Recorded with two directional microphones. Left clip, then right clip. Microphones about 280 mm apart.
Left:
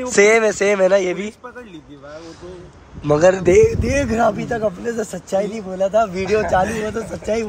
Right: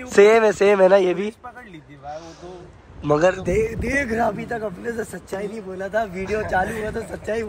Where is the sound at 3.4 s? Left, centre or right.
Left.